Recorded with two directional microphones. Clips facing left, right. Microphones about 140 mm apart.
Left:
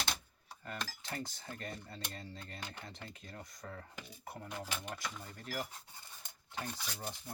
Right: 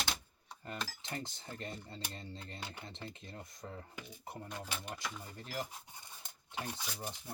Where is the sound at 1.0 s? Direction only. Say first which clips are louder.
Even; 25° right (ahead or behind).